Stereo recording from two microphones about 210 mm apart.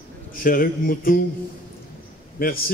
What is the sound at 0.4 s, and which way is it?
Speech, 45° left (ahead or behind).